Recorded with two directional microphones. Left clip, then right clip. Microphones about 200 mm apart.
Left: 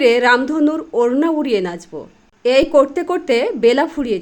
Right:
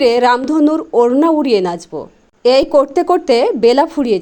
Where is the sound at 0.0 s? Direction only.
20° right (ahead or behind).